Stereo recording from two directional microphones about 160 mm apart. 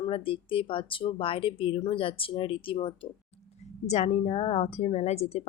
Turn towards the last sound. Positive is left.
turn(degrees=40)  # may be behind; listen again after turning